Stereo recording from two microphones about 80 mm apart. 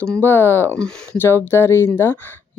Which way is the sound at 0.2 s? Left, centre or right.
Left.